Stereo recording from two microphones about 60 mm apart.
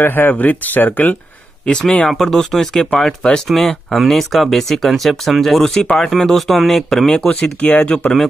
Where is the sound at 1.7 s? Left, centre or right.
Centre.